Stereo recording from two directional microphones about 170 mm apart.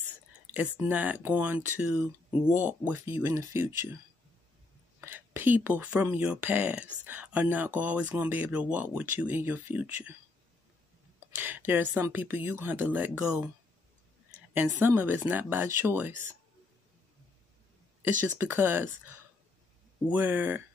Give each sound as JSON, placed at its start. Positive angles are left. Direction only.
{"t": 0.7, "sound": "speech", "side_deg": -10}
{"t": 5.0, "sound": "a woman's voice", "side_deg": -10}
{"t": 11.3, "sound": "speech", "side_deg": -10}
{"t": 14.5, "sound": "speech", "side_deg": -10}
{"t": 18.2, "sound": "speech", "side_deg": -10}